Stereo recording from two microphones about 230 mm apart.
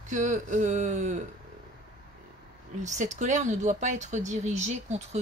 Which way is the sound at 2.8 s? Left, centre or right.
Right.